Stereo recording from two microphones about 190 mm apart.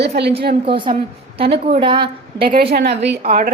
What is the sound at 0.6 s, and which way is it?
A woman's voice, 25° right (ahead or behind).